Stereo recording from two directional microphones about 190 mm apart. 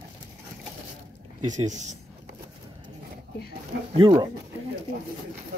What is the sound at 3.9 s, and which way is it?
Speech, 25° right (ahead or behind).